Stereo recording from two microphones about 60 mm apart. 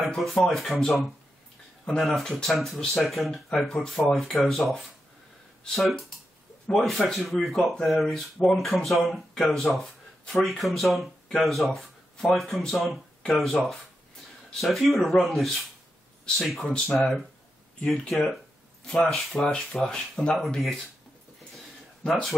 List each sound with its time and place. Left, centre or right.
0.0 s speech: centre
1.9 s speech: centre
19.3 s speech: centre
21.5 s a sound: centre